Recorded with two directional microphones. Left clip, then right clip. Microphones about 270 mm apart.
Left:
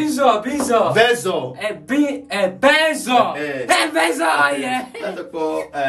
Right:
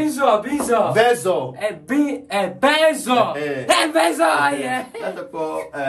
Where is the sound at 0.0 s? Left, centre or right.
Centre.